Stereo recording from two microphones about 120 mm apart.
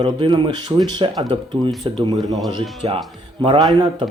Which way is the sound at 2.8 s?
45° right (ahead or behind).